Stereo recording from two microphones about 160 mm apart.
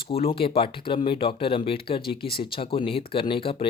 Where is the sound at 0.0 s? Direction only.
35° left (ahead or behind).